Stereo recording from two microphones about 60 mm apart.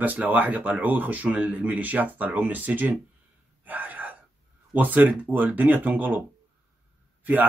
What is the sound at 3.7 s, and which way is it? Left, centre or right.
Gasp, right.